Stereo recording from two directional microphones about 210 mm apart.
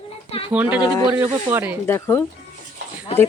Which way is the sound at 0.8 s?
20° left (ahead or behind).